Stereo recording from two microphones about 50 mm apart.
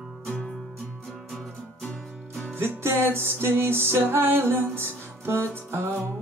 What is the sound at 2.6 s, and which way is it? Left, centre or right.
Music, right.